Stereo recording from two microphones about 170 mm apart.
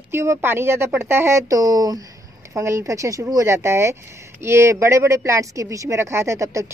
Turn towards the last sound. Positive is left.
turn(degrees=-15)  # may be behind; listen again after turning